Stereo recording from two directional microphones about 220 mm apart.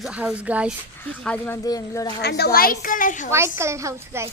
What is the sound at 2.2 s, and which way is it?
A woman's voice, 50° left (ahead or behind).